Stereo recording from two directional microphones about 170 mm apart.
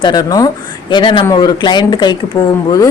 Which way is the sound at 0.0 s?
25° left (ahead or behind).